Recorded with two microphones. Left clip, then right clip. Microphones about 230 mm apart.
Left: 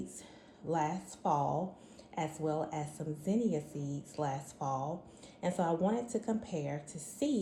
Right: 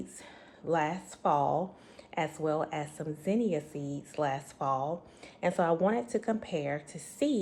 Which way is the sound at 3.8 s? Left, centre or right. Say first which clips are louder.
Right 4 dB; right.